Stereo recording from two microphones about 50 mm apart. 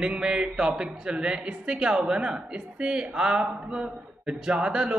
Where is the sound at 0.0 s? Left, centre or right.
Centre.